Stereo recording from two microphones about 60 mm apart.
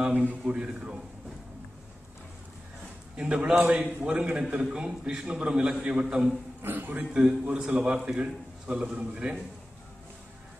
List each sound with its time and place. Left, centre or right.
0.0 s a man's voice: right
3.2 s a man's voice: centre
6.6 s a man's voice: right
7.4 s a man's voice: centre